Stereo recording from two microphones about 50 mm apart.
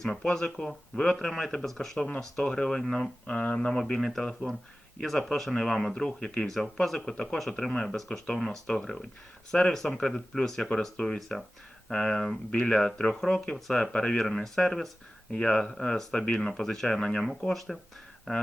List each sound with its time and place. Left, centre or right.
0.0 s speech: centre
3.2 s speech: left
3.7 s speech: centre
13.9 s speech: centre